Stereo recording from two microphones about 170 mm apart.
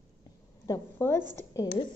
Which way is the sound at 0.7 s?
15° left (ahead or behind).